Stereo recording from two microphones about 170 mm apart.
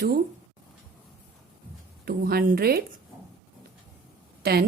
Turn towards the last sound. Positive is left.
turn(degrees=-65)  # may be behind; listen again after turning